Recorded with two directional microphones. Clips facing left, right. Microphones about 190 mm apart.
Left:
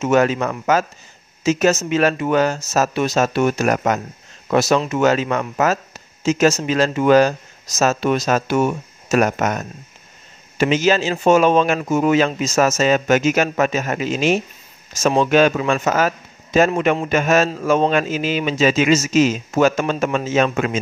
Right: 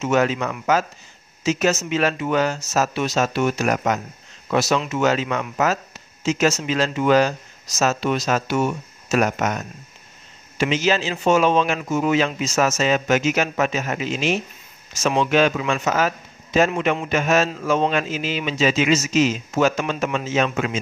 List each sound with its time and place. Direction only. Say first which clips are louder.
0.0 s speech: left 3 dB; 45° left (ahead or behind)